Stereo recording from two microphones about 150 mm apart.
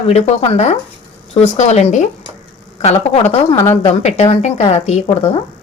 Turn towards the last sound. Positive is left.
turn(degrees=40)  # may be behind; listen again after turning